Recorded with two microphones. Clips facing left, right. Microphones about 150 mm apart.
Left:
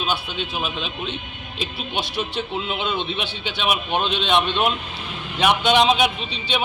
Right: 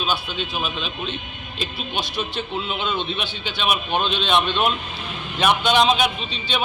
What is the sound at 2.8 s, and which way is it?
Speech, 20° left (ahead or behind).